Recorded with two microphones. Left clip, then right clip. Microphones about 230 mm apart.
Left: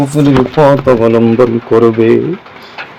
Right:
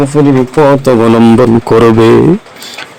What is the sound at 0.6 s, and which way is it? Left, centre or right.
Mantra, right.